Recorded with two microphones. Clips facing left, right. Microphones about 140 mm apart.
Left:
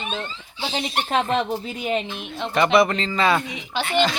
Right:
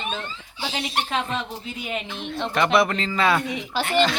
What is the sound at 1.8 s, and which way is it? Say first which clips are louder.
Speech: left 6 dB; 35° left (ahead or behind).